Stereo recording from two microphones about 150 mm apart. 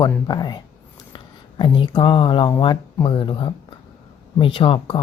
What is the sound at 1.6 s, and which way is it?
Speech, 35° left (ahead or behind).